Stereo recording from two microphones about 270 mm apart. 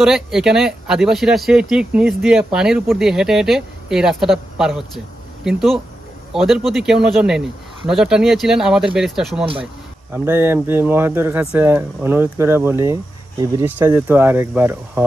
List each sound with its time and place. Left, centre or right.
0.0 s speech: centre